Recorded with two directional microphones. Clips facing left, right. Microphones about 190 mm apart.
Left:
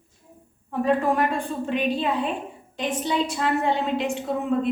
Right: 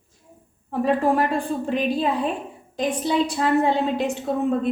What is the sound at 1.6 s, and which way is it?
A woman's voice, 35° right (ahead or behind).